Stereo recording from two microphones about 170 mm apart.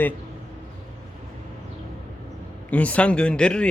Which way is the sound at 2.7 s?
10° left (ahead or behind).